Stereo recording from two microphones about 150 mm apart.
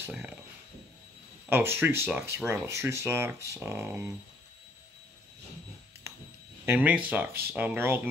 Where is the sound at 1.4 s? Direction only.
15° right (ahead or behind).